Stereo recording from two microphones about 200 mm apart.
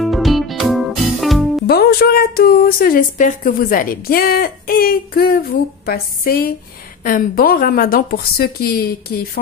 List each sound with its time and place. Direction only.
0.0 s music: centre (ahead or behind)
1.7 s a woman's voice: 50° left (ahead or behind)